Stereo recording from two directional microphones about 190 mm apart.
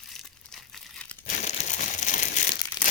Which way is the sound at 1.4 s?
40° left (ahead or behind).